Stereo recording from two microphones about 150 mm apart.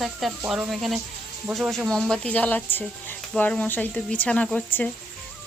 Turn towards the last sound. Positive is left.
turn(degrees=10)  # may be behind; listen again after turning